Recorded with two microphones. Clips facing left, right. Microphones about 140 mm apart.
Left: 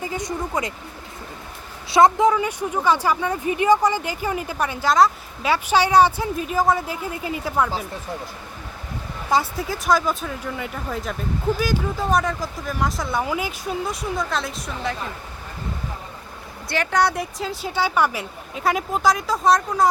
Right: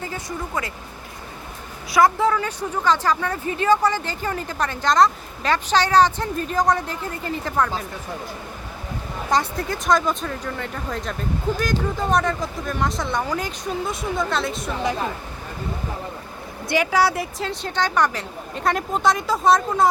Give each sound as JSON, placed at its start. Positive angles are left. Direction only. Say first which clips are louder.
{"t": 0.0, "sound": "speech", "louder": "left 3 dB", "side_deg": 20}
{"t": 1.9, "sound": "a woman's voice", "louder": "left 2 dB", "side_deg": 20}
{"t": 9.3, "sound": "speech", "louder": "left 1 dB", "side_deg": 5}
{"t": 16.6, "sound": "speech", "louder": "right 1 dB", "side_deg": -10}